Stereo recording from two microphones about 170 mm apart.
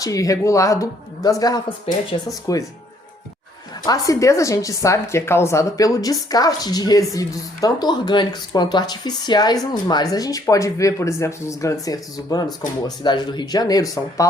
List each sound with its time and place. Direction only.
0.0 s speech: 20° left (ahead or behind)
3.8 s speech: 20° left (ahead or behind)